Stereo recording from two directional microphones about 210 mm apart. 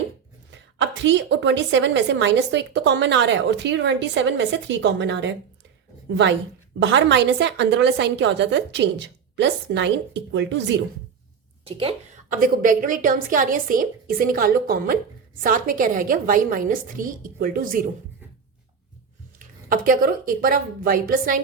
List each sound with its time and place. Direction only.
0.5 s a woman's voice: 60° right (ahead or behind)
6.7 s a woman's voice: 60° right (ahead or behind)
11.6 s a woman's voice: 25° right (ahead or behind)
12.3 s a woman's voice: 40° right (ahead or behind)
19.4 s a woman's voice: 40° right (ahead or behind)